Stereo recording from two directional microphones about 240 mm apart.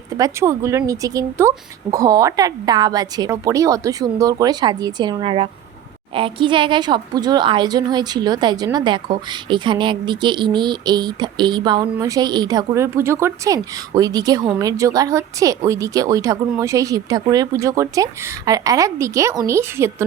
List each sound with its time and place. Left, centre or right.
0.2 s a woman's voice: centre